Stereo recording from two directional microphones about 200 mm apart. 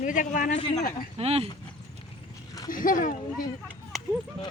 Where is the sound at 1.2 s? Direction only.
30° right (ahead or behind).